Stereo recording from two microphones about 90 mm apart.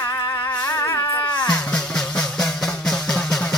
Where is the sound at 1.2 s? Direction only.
60° left (ahead or behind).